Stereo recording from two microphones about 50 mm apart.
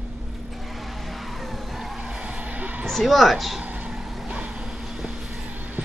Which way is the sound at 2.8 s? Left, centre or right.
Centre.